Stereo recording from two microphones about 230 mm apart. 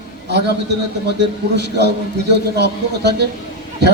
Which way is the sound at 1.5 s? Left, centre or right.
Right.